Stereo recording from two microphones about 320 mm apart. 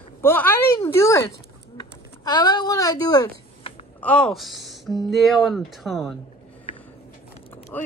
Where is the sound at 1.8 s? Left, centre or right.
Centre.